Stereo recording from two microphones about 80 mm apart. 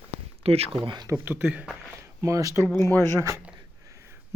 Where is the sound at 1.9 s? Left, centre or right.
Right.